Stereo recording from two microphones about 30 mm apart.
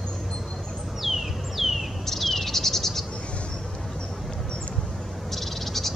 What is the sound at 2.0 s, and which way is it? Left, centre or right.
Cricket, centre.